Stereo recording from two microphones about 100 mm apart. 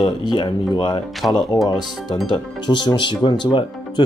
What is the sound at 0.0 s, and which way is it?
Speech, 50° left (ahead or behind).